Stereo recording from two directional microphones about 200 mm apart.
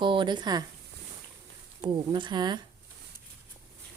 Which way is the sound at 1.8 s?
25° right (ahead or behind).